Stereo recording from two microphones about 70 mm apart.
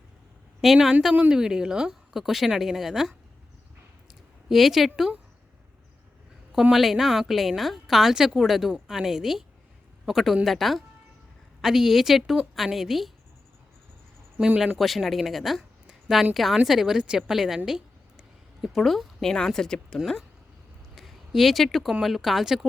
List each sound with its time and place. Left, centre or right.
0.6 s a woman's voice: centre
1.1 s a woman's voice: right
1.4 s a woman's voice: centre
4.4 s a woman's voice: centre
6.5 s a woman's voice: centre
14.3 s speech: centre
14.8 s a woman's voice: centre
20.9 s a sound: centre
22.0 s a woman's voice: centre